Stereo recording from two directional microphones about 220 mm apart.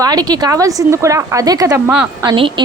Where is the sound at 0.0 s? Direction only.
15° right (ahead or behind).